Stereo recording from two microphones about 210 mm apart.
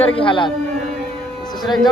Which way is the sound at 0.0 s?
25° left (ahead or behind).